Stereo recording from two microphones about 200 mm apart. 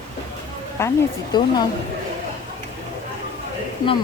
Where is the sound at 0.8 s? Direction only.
15° left (ahead or behind).